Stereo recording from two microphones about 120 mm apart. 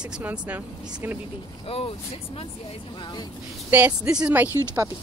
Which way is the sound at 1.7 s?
50° left (ahead or behind).